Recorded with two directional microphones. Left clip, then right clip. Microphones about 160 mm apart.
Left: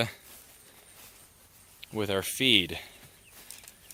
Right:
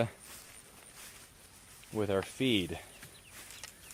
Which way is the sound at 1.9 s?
20° left (ahead or behind).